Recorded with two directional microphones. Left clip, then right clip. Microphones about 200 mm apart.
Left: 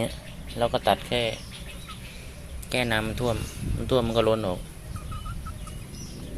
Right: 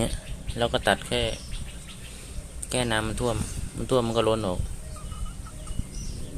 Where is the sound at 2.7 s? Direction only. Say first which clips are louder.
Left 1 dB; 10° right (ahead or behind).